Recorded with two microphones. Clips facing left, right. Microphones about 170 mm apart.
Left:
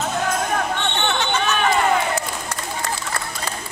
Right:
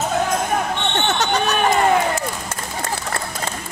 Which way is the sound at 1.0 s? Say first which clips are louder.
Right 2 dB; 40° right (ahead or behind).